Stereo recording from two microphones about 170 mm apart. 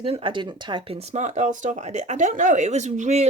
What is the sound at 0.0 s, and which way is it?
Speech, 35° right (ahead or behind).